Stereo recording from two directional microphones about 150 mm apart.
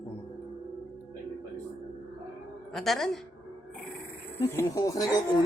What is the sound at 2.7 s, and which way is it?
Speech, centre (ahead or behind).